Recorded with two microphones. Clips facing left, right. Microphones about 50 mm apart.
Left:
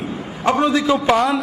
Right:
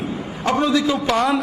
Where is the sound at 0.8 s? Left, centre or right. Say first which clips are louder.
Left 4 dB; left.